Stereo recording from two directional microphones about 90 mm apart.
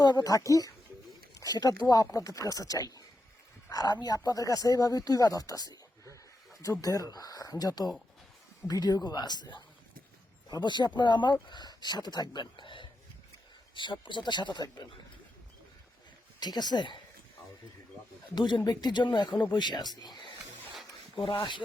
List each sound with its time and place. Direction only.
0.0 s speech: 45° left (ahead or behind)
16.4 s speech: 50° left (ahead or behind)
18.3 s a man's voice: 55° left (ahead or behind)
21.2 s speech: 65° left (ahead or behind)